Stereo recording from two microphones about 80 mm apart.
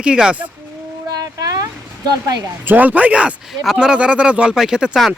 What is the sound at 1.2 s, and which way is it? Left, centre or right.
Speech, right.